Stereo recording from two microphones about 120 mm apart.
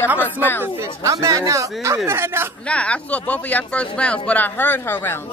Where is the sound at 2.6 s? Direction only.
10° left (ahead or behind).